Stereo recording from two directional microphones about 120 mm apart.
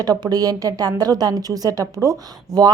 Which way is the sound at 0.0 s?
35° right (ahead or behind).